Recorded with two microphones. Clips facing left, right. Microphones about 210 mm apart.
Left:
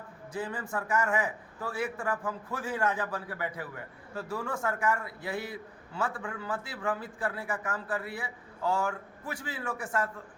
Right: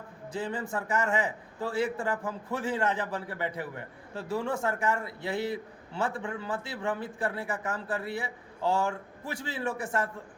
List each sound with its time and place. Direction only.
0.3 s a man's voice: 25° right (ahead or behind)